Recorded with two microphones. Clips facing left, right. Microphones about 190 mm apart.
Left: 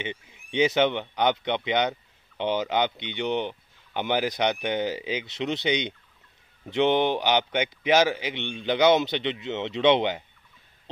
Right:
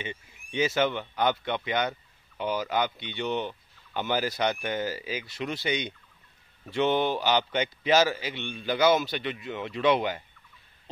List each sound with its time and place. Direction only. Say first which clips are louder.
0.3 s speech: left 5 dB; 20° left (ahead or behind)